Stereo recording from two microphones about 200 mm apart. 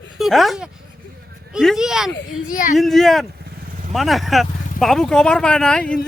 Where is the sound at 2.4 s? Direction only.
40° left (ahead or behind).